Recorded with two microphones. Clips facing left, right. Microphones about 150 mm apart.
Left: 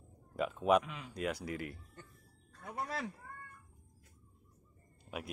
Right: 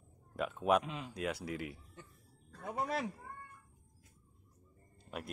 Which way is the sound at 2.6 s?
20° right (ahead or behind).